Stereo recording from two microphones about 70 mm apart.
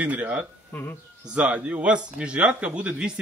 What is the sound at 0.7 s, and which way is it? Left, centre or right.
Speech, left.